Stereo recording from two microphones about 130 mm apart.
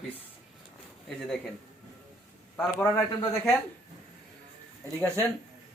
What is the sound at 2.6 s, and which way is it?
Speech, 15° left (ahead or behind).